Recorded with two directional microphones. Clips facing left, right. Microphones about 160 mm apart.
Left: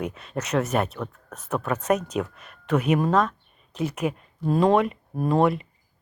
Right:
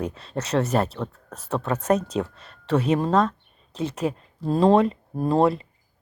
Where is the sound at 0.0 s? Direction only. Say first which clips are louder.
Right 1 dB; 30° right (ahead or behind).